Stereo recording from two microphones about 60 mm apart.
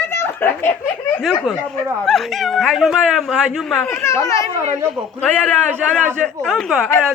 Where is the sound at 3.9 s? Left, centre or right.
Left.